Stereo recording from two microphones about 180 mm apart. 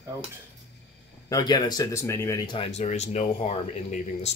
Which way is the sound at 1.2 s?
20° left (ahead or behind).